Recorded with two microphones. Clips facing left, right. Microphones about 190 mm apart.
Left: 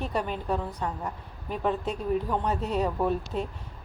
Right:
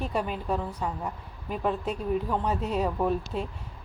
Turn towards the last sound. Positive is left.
turn(degrees=0)  # may be behind; listen again after turning